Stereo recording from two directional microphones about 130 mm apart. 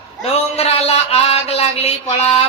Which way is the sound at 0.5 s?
55° left (ahead or behind).